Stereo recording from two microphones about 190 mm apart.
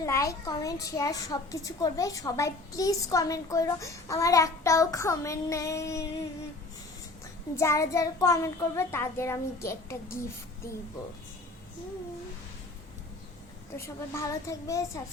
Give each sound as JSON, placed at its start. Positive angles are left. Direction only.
{"t": 0.0, "sound": "a child's voice", "side_deg": 15}
{"t": 7.5, "sound": "a child's voice", "side_deg": 15}
{"t": 13.8, "sound": "a child's voice", "side_deg": 15}